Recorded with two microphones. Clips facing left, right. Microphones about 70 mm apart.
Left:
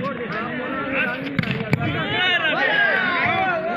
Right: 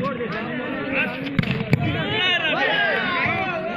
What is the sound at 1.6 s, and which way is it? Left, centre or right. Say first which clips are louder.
Fireworks: even; left.